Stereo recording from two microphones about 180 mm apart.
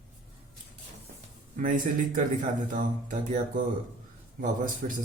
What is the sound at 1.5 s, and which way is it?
A man's voice, 45° right (ahead or behind).